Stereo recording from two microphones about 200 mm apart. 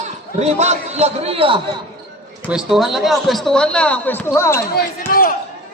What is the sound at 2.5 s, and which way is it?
A man's voice, centre (ahead or behind).